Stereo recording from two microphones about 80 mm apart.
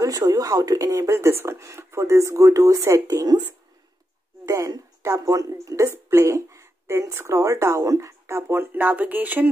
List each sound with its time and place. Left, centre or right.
0.0 s speech: right
1.1 s speech: right
4.5 s speech: right